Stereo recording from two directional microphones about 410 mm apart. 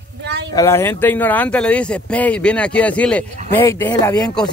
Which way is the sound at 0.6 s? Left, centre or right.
Centre.